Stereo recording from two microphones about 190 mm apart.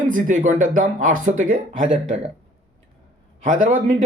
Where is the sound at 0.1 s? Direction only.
45° right (ahead or behind).